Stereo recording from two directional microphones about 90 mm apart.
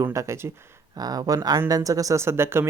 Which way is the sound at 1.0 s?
45° right (ahead or behind).